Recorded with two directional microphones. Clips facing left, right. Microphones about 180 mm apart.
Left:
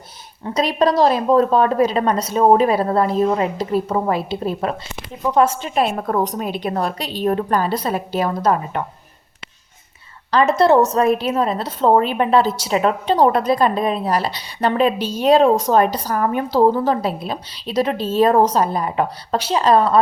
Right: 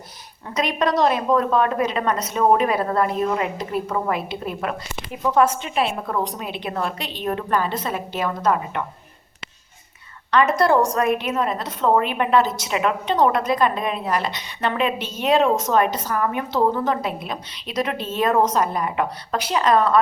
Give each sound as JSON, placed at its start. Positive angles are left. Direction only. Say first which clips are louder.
{"t": 0.4, "sound": "a woman's voice", "louder": "left 5 dB", "side_deg": 30}
{"t": 10.3, "sound": "a woman's voice", "louder": "left 4 dB", "side_deg": 25}